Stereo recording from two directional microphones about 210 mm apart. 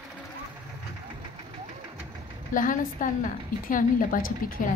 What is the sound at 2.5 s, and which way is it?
A woman's voice, 40° left (ahead or behind).